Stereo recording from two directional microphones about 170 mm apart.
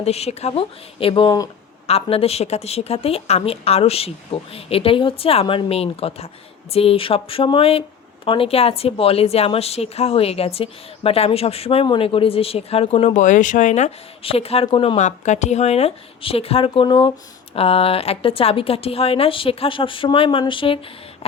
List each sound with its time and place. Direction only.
0.0 s speech: 40° left (ahead or behind)
1.9 s speech: 35° left (ahead or behind)
14.9 s speech: 45° left (ahead or behind); by 20.7 s 30° left (ahead or behind)